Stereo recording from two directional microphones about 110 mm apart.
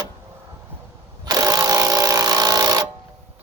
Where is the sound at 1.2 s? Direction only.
35° right (ahead or behind).